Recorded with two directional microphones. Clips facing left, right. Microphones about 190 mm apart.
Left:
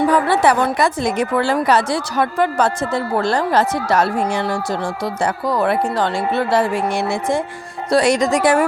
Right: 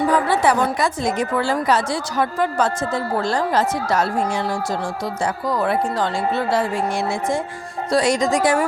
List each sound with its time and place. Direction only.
0.1 s a woman's voice: 65° left (ahead or behind)